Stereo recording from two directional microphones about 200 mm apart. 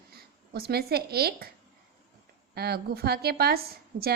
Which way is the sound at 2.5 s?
50° right (ahead or behind).